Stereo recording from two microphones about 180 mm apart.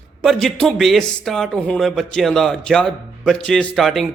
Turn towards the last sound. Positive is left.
turn(degrees=0)  # may be behind; listen again after turning